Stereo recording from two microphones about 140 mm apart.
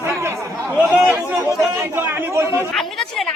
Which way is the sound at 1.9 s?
15° right (ahead or behind).